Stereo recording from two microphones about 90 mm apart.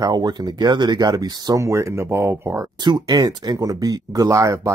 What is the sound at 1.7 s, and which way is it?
Speech, 35° right (ahead or behind).